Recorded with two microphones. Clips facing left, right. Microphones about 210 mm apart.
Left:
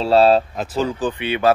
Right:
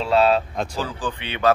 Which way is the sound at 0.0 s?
35° left (ahead or behind).